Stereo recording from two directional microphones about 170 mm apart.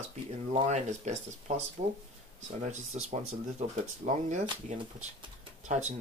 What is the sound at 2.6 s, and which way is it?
Speech, 45° right (ahead or behind).